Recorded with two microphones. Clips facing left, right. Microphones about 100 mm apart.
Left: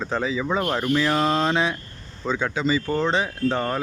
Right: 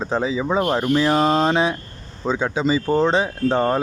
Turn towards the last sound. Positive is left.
turn(degrees=-25)  # may be behind; listen again after turning